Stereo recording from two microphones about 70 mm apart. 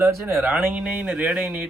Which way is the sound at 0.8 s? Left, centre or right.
Right.